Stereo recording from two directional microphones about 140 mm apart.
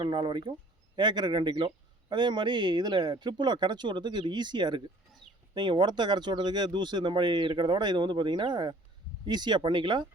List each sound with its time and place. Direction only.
0.0 s speech: 35° right (ahead or behind)
5.2 s a sound: 35° right (ahead or behind)
5.5 s speech: 30° right (ahead or behind)